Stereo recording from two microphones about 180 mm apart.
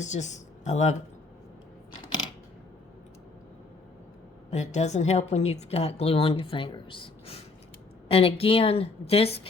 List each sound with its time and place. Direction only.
0.0 s speech: 40° left (ahead or behind)
4.5 s a woman's voice: 40° left (ahead or behind)